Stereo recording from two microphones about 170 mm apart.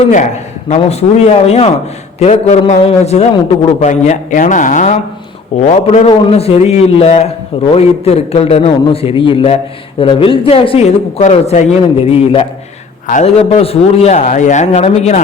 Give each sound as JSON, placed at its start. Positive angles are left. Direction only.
{"t": 0.8, "sound": "a man's voice", "side_deg": 40}
{"t": 13.1, "sound": "a man's voice", "side_deg": 45}